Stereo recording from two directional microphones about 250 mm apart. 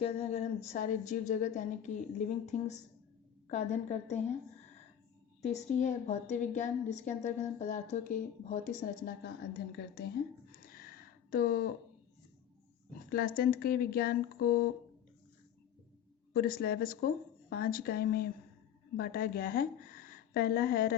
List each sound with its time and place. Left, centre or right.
0.0 s a woman's voice: left
5.4 s a woman's voice: left
10.6 s a sound: left
13.1 s speech: left
16.3 s a woman's voice: left